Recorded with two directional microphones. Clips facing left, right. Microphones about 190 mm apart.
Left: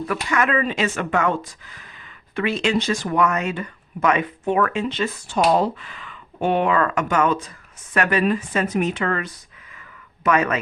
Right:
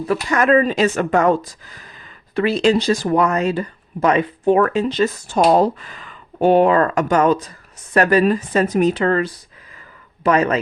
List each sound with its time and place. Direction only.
0.1 s speech: 35° right (ahead or behind)